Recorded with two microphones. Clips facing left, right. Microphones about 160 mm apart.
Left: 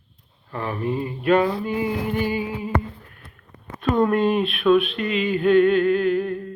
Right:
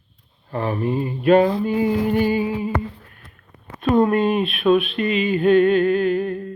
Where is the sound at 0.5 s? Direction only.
30° right (ahead or behind).